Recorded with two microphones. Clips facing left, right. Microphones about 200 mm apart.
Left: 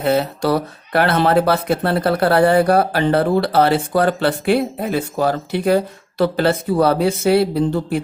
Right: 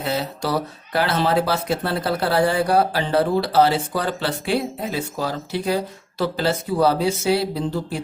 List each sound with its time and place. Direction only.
0.0 s speech: 60° left (ahead or behind)